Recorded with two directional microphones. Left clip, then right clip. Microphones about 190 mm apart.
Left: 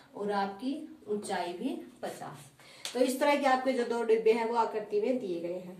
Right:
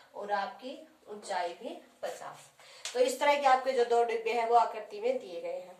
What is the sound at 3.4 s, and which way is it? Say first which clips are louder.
A woman's voice: right 2 dB; 40° right (ahead or behind).